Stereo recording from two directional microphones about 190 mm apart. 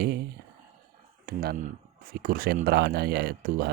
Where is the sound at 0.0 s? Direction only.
55° right (ahead or behind).